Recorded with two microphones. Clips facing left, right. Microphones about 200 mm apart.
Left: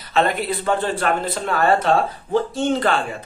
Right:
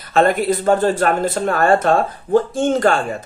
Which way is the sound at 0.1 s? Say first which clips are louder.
Right 5 dB; 45° right (ahead or behind).